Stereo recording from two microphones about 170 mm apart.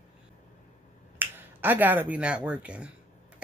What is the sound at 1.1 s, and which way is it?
Speech, 10° right (ahead or behind).